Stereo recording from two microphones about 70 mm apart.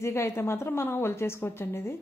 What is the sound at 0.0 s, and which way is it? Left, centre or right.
A woman's voice, left.